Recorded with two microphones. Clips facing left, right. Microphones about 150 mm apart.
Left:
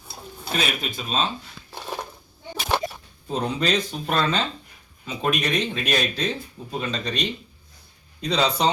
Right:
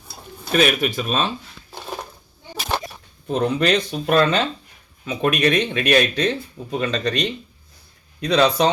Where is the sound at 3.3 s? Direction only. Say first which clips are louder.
Right 5 dB; 65° right (ahead or behind).